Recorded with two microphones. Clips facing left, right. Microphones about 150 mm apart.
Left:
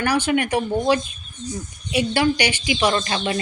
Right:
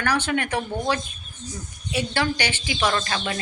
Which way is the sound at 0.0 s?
10° left (ahead or behind).